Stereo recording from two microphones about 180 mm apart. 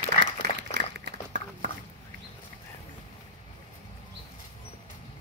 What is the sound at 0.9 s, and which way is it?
Dog, 75° right (ahead or behind).